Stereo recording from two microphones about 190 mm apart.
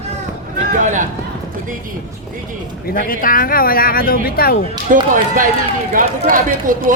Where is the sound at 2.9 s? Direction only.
45° left (ahead or behind).